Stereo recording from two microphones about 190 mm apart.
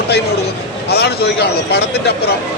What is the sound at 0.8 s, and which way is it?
Speech, 60° left (ahead or behind).